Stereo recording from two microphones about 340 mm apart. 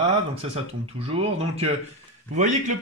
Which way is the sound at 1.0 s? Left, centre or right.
Centre.